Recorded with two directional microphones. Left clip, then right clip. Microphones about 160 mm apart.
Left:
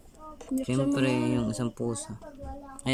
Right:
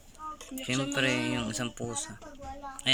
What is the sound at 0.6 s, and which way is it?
Speech, 25° left (ahead or behind).